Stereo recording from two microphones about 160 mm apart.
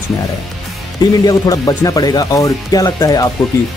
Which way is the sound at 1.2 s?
25° left (ahead or behind).